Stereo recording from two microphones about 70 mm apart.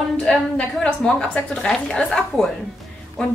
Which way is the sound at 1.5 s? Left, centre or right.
Centre.